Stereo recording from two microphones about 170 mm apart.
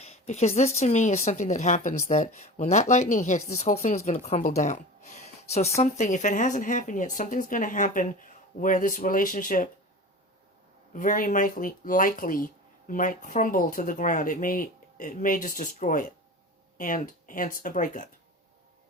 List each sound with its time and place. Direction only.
0.0 s speech: 40° left (ahead or behind)
10.9 s speech: 50° left (ahead or behind)